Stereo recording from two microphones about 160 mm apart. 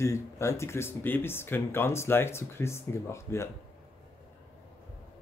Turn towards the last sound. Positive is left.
turn(degrees=15)  # may be behind; listen again after turning